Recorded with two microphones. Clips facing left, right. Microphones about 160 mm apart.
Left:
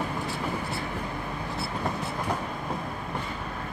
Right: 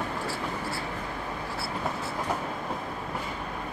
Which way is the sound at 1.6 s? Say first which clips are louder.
Left 2 dB; 20° left (ahead or behind).